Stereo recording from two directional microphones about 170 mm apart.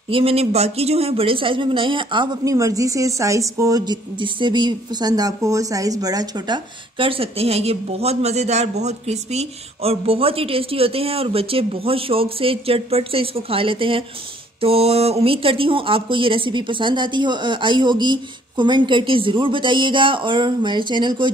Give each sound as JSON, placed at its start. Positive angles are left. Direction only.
{"t": 0.1, "sound": "speech", "side_deg": -35}